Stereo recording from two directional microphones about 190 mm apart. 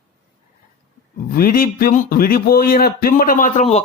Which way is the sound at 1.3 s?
50° left (ahead or behind).